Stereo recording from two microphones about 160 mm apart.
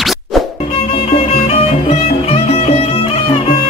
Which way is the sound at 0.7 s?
40° left (ahead or behind).